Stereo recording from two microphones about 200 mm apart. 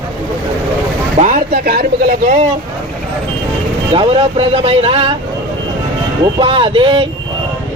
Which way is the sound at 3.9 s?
30° right (ahead or behind).